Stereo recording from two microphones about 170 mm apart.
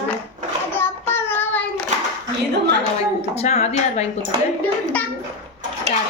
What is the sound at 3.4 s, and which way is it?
Speech, 40° left (ahead or behind).